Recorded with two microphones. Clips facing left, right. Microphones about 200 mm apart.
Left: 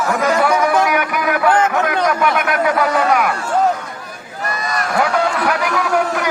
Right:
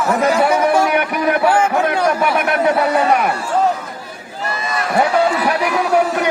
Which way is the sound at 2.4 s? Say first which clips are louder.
Right 1 dB; 30° right (ahead or behind).